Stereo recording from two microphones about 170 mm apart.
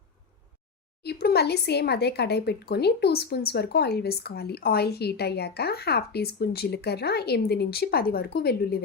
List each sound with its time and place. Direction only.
1.0 s speech: 70° left (ahead or behind)